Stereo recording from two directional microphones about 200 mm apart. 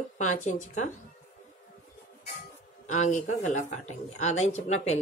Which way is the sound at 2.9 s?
35° left (ahead or behind).